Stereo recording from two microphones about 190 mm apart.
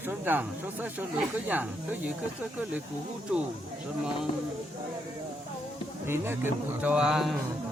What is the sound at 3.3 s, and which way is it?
Speech, 5° right (ahead or behind).